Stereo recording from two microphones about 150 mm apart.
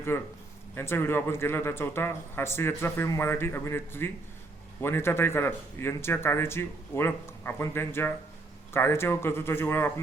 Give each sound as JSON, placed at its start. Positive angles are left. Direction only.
{"t": 0.1, "sound": "speech", "side_deg": 15}